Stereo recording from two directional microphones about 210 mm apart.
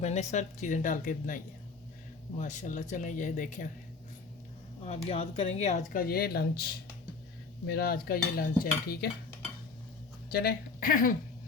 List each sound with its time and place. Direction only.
0.0 s speech: 30° left (ahead or behind)
2.4 s speech: 35° left (ahead or behind)
4.8 s speech: 30° left (ahead or behind); by 6.7 s 50° left (ahead or behind)
7.7 s cutlery: 45° left (ahead or behind)
10.3 s speech: 45° left (ahead or behind)